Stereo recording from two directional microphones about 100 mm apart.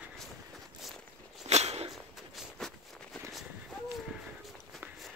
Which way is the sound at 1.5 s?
90° right.